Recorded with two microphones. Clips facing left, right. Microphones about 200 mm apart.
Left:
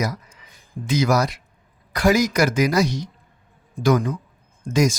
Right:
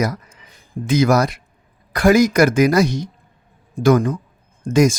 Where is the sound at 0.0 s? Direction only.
55° right (ahead or behind).